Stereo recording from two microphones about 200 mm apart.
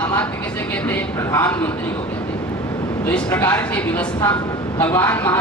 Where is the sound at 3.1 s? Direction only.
10° left (ahead or behind).